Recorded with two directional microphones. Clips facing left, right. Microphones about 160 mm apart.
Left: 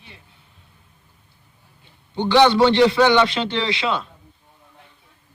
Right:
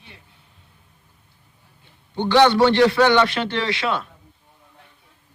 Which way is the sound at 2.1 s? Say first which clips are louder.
Even; 15° left (ahead or behind).